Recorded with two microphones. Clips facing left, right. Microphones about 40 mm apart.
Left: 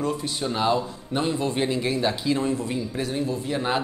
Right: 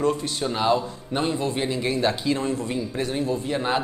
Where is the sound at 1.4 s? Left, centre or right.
Centre.